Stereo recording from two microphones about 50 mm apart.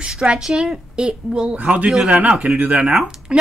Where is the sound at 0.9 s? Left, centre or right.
Centre.